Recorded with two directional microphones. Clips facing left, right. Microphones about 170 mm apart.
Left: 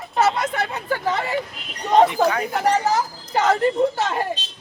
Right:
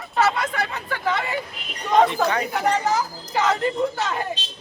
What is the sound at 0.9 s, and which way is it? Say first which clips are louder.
Speech: left 2 dB; 35° left (ahead or behind).